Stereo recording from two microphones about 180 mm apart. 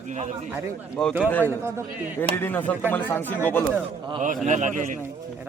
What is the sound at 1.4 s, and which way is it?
Speech, 15° right (ahead or behind).